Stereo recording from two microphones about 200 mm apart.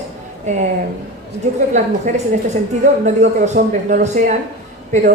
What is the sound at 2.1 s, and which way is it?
A woman's voice, 40° right (ahead or behind).